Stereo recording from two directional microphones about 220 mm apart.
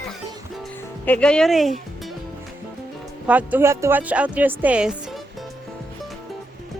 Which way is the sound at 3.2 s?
5° right (ahead or behind).